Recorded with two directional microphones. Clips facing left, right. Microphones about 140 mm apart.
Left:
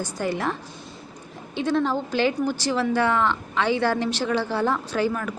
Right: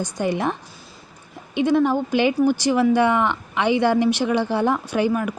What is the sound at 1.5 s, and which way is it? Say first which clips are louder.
Speech: right 5 dB; 15° right (ahead or behind).